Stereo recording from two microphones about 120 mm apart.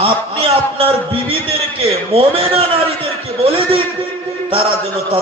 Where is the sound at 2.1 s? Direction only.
50° right (ahead or behind).